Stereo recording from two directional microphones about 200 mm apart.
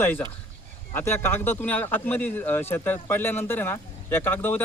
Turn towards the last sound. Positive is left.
turn(degrees=10)  # may be behind; listen again after turning